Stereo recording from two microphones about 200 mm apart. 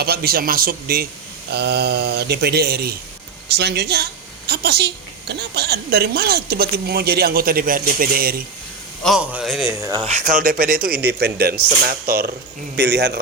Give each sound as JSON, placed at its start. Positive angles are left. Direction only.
{"t": 0.0, "sound": "speech", "side_deg": -50}
{"t": 9.0, "sound": "a man's voice", "side_deg": 0}
{"t": 9.8, "sound": "speech", "side_deg": -20}
{"t": 10.1, "sound": "speech", "side_deg": -40}